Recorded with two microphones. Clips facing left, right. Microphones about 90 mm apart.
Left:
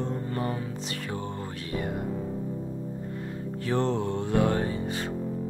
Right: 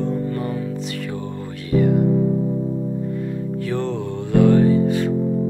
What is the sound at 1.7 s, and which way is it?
Music, 30° left (ahead or behind).